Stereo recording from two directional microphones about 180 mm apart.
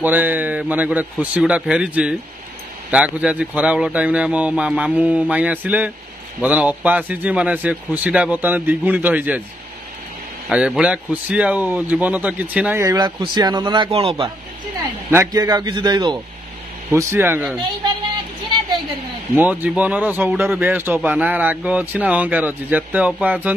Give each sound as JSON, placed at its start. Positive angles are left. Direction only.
{"t": 0.0, "sound": "speech", "side_deg": -10}
{"t": 10.5, "sound": "speech", "side_deg": -5}
{"t": 15.0, "sound": "a man's voice", "side_deg": -15}
{"t": 19.3, "sound": "speech", "side_deg": -10}